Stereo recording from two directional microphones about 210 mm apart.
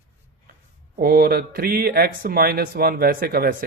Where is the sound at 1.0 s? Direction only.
45° right (ahead or behind).